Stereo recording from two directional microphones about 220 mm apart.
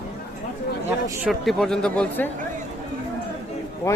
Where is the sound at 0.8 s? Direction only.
Centre (ahead or behind).